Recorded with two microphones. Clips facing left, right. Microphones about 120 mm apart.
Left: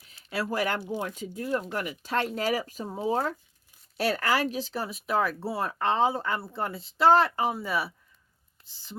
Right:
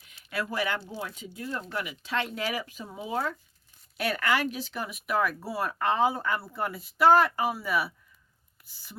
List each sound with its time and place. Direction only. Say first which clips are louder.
0.0 s a sound: left 2 dB; 35° left (ahead or behind)
0.5 s speech: left 2 dB; 45° left (ahead or behind)
0.8 s speech: left 5 dB; 15° left (ahead or behind)
1.1 s speech: left 6 dB; 45° left (ahead or behind); by 9.0 s 25° left (ahead or behind)